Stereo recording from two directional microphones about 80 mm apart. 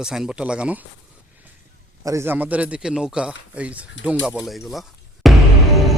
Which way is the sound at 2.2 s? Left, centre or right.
Right.